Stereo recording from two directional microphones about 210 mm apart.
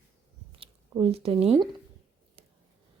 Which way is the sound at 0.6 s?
25° right (ahead or behind).